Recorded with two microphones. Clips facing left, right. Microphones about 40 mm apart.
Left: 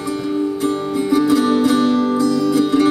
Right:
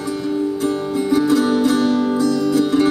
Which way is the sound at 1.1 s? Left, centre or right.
Centre.